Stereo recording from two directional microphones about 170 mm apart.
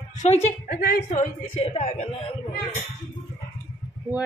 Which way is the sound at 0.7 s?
70° left (ahead or behind).